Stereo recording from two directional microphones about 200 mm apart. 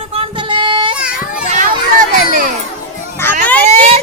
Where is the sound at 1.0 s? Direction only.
5° right (ahead or behind).